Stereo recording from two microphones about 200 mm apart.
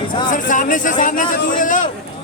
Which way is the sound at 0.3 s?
40° left (ahead or behind).